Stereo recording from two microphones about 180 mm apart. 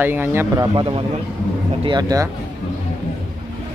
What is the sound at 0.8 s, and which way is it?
A man's voice, 30° right (ahead or behind).